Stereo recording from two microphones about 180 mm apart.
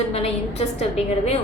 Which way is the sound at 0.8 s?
35° left (ahead or behind).